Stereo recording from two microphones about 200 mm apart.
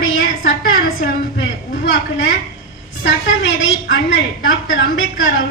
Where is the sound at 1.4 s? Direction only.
65° left (ahead or behind).